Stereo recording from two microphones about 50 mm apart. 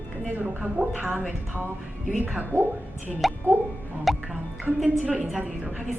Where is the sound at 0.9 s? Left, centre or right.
Right.